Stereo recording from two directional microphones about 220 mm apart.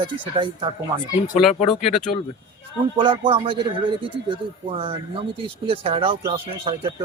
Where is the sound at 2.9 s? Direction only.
25° right (ahead or behind).